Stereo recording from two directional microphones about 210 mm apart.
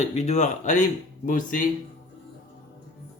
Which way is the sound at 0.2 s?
35° left (ahead or behind).